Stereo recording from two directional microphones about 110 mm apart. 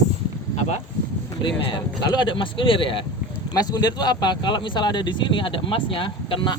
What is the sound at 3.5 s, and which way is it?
Speech, 35° left (ahead or behind).